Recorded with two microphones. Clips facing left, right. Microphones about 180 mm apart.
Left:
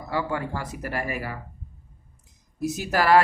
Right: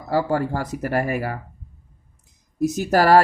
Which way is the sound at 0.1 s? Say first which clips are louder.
Right 7 dB; 40° right (ahead or behind).